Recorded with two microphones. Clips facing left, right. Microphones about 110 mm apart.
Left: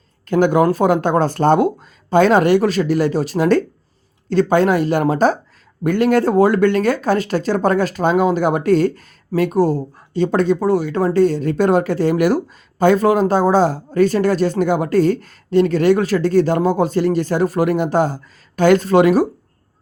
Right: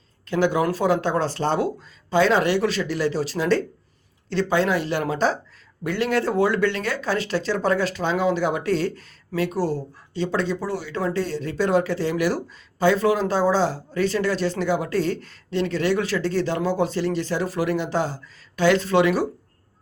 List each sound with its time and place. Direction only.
0.3 s speech: 50° left (ahead or behind)